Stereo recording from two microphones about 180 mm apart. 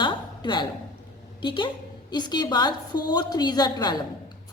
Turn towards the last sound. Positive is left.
turn(degrees=25)  # may be behind; listen again after turning